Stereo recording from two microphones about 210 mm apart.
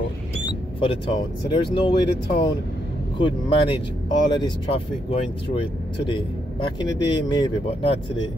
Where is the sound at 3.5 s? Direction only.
25° left (ahead or behind).